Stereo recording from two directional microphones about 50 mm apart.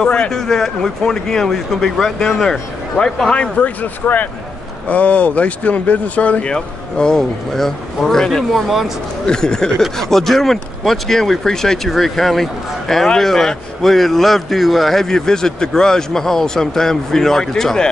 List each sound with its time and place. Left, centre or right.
0.0 s speech: centre
3.3 s speech: left
6.5 s speech: centre
9.2 s speech: centre